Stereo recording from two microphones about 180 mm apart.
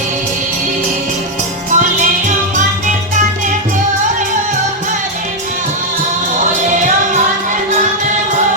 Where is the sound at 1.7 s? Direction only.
40° right (ahead or behind).